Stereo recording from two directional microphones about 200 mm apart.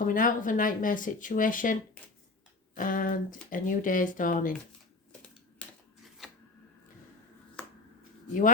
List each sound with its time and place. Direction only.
0.0 s speech: 40° left (ahead or behind)
8.3 s speech: 40° left (ahead or behind)